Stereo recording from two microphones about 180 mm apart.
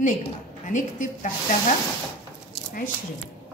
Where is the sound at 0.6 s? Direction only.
45° left (ahead or behind).